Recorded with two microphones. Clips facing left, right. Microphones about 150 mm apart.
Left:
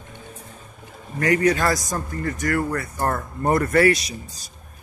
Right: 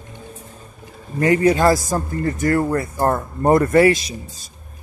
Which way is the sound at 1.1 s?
25° right (ahead or behind).